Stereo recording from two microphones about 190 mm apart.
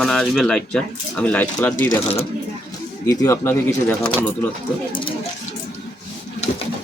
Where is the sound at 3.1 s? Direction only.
15° left (ahead or behind).